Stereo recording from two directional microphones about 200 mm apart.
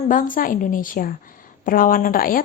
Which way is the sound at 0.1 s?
45° left (ahead or behind).